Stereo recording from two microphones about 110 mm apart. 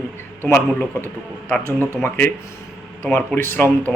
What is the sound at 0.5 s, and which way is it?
A man's voice, 15° left (ahead or behind).